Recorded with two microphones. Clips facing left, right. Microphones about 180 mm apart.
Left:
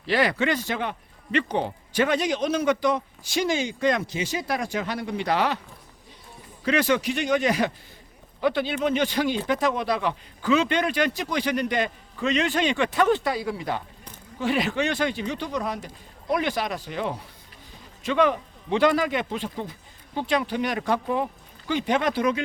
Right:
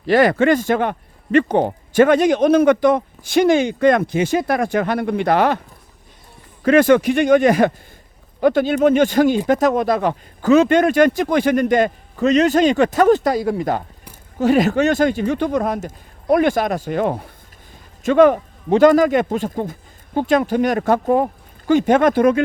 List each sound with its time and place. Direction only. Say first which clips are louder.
0.0 s speech: right 9 dB; 50° right (ahead or behind)